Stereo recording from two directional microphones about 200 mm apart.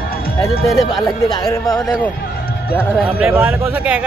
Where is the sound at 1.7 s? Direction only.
5° left (ahead or behind).